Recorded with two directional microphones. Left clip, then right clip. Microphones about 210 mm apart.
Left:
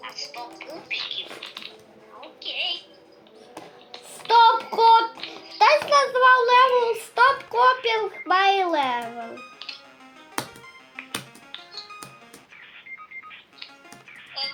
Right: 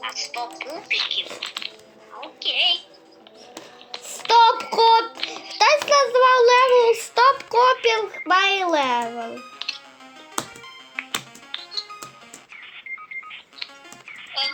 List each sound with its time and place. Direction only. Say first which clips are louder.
0.0 s a woman's voice: right 6 dB; 40° right (ahead or behind)
3.9 s child singing: right 2 dB; 45° right (ahead or behind)
9.6 s music: right 8 dB; 40° right (ahead or behind)
11.0 s music: right 5 dB; 40° right (ahead or behind)
13.6 s music: right 8 dB; 40° right (ahead or behind)
14.4 s a sound: right 6 dB; 40° right (ahead or behind)